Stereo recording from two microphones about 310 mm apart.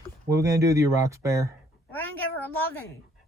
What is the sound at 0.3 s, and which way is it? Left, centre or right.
Speech, centre.